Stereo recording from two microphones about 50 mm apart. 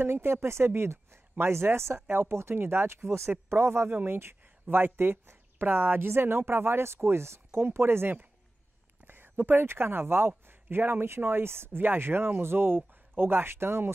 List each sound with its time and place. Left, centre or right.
0.0 s speech: right
3.9 s speech: right